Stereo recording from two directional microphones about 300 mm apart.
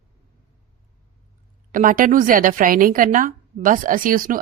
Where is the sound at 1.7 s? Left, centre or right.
Right.